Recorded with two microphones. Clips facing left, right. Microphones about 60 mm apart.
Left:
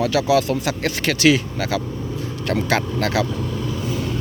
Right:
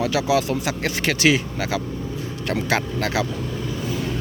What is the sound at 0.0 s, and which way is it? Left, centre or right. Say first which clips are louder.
Speech: left 3 dB; centre.